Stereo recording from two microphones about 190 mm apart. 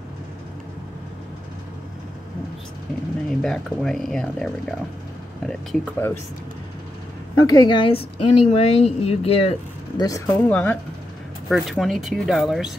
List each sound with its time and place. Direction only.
3.3 s speech: centre (ahead or behind)
7.4 s a woman's voice: 20° left (ahead or behind)
10.0 s speech: 15° left (ahead or behind); by 12.7 s centre (ahead or behind)